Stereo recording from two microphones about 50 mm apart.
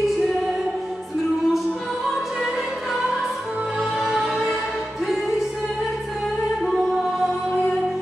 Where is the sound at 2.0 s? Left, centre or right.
Centre.